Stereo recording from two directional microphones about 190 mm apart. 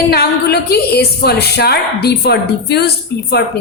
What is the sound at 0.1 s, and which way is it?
A woman's voice, 55° left (ahead or behind).